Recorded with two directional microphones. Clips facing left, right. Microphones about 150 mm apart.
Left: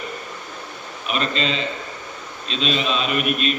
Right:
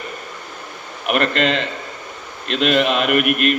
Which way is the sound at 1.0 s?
65° right (ahead or behind).